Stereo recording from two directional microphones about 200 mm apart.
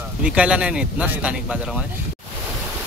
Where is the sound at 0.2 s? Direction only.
5° right (ahead or behind).